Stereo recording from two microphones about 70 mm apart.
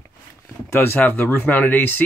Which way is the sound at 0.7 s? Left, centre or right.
Left.